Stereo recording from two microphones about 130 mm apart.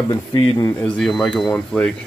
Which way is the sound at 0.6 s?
20° left (ahead or behind).